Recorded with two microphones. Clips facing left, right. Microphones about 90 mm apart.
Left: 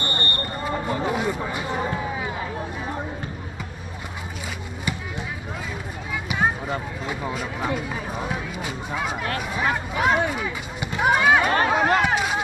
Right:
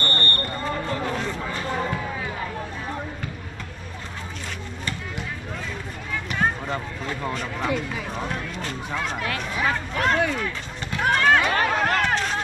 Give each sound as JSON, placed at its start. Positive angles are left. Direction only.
{"t": 0.0, "sound": "basketball bounce", "side_deg": 15}
{"t": 6.2, "sound": "a sound", "side_deg": 10}
{"t": 10.3, "sound": "run", "side_deg": 10}